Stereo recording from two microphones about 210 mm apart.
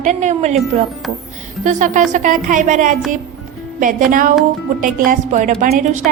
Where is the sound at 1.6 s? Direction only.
35° right (ahead or behind).